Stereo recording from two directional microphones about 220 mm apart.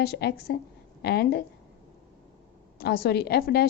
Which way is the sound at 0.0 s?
45° left (ahead or behind).